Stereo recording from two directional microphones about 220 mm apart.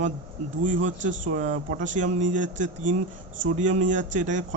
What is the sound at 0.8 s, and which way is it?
Speech, 35° right (ahead or behind).